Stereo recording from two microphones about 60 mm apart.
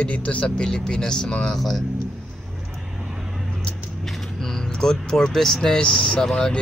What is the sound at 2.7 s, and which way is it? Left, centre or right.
Vehicle, centre.